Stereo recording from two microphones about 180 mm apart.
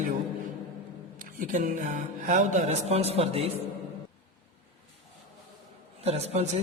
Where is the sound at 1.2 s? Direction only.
45° right (ahead or behind).